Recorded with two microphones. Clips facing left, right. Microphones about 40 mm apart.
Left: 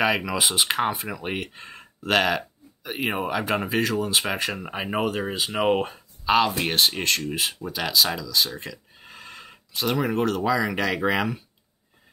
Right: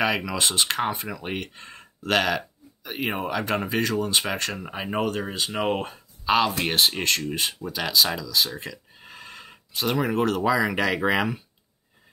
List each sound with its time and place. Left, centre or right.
0.0 s speech: centre